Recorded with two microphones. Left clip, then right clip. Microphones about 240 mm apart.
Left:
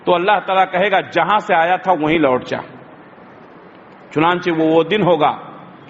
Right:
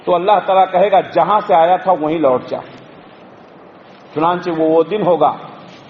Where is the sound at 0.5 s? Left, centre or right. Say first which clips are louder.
Right 3 dB; left.